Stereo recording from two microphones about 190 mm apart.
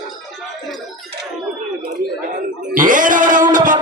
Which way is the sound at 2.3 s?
45° right (ahead or behind).